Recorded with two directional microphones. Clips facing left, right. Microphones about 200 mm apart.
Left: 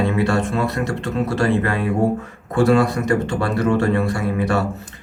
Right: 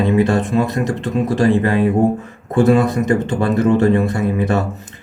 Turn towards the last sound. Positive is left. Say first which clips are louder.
# right 3 dB
turn(degrees=-20)  # may be behind; listen again after turning